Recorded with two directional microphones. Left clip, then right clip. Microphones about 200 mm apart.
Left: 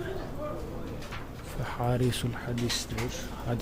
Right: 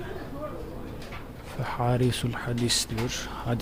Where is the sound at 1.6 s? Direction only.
15° right (ahead or behind).